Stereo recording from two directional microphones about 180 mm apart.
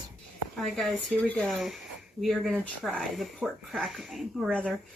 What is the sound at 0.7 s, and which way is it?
Speech, 5° left (ahead or behind).